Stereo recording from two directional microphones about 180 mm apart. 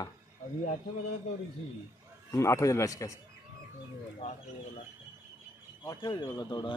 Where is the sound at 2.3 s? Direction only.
15° left (ahead or behind).